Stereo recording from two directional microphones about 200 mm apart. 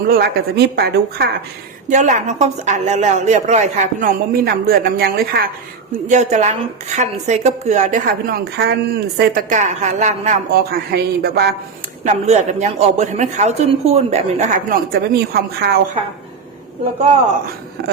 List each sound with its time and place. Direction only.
0.1 s a woman's voice: 55° right (ahead or behind)
1.9 s a woman's voice: 35° right (ahead or behind)
4.4 s a woman's voice: 50° right (ahead or behind)
6.1 s a woman's voice: 35° right (ahead or behind)
8.5 s a woman's voice: 55° right (ahead or behind)
12.0 s a woman's voice: 35° right (ahead or behind); by 15.8 s 55° right (ahead or behind)
17.8 s a woman's voice: 50° right (ahead or behind)